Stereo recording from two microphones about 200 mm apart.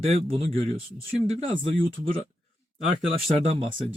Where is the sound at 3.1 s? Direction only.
30° right (ahead or behind).